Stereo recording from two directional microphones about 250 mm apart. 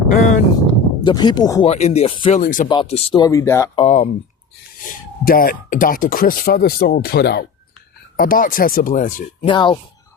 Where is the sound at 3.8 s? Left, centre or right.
Left.